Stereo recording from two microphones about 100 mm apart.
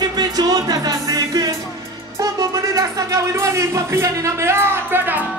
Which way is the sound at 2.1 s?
35° right (ahead or behind).